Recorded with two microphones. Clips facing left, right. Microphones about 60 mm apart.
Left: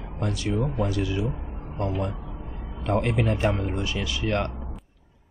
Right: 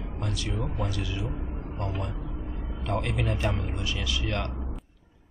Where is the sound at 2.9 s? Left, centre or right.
Left.